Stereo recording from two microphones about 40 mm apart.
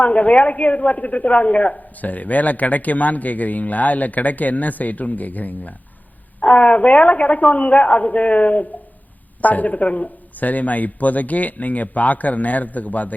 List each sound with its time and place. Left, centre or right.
0.0 s a woman's voice: left
6.4 s a woman's voice: left